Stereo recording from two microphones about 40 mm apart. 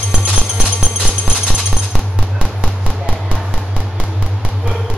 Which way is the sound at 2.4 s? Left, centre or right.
Right.